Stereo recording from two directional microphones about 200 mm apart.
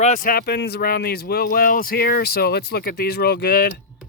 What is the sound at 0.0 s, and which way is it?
A man's voice, 40° left (ahead or behind).